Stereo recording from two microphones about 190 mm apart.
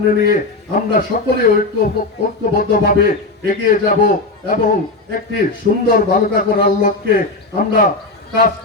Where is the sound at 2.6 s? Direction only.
50° left (ahead or behind).